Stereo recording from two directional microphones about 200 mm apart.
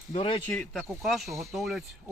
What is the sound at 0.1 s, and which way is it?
Speech, 30° left (ahead or behind).